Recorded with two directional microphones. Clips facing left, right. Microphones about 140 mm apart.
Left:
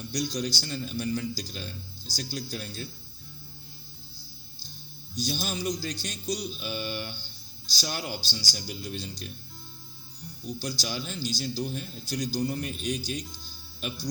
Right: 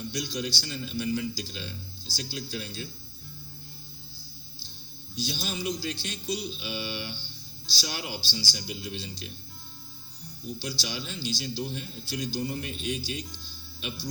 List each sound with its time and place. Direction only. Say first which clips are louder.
0.1 s a man's voice: left 5 dB; 40° left (ahead or behind)
5.1 s a man's voice: left 2 dB; 45° left (ahead or behind)
10.6 s a man's voice: left 3 dB; 45° left (ahead or behind)